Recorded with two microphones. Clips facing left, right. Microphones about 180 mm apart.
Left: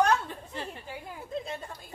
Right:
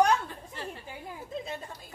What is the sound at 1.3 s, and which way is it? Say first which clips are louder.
Speech: left 2 dB; centre (ahead or behind).